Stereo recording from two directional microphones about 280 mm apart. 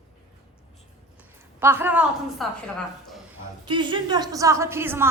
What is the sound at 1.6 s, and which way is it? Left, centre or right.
Speech, centre.